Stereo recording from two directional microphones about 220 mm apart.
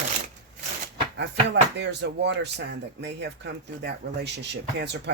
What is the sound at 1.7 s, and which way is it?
Speech, 50° right (ahead or behind).